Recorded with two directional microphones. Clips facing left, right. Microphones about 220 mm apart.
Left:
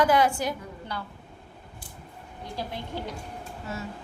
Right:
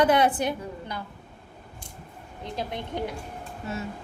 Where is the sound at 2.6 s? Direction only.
20° right (ahead or behind).